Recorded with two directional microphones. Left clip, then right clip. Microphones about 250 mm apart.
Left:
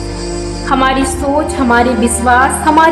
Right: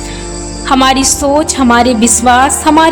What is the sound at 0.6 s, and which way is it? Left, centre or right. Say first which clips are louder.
A woman's voice: right 3 dB; right.